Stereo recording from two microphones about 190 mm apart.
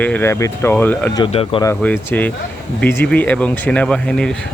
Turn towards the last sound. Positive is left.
turn(degrees=5)  # may be behind; listen again after turning